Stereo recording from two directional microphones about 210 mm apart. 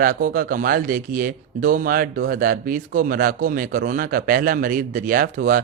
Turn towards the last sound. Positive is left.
turn(degrees=-40)  # may be behind; listen again after turning